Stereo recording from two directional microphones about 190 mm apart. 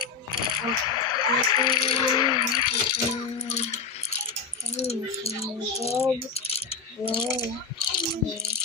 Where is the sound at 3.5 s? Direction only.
35° left (ahead or behind).